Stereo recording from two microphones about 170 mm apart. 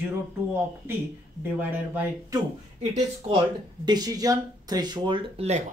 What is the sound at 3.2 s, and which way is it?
Speech, 25° right (ahead or behind).